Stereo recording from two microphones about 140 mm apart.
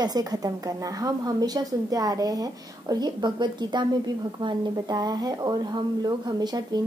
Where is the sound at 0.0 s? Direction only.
30° right (ahead or behind).